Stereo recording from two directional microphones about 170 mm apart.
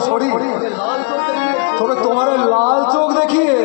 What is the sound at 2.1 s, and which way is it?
Speech, 40° right (ahead or behind).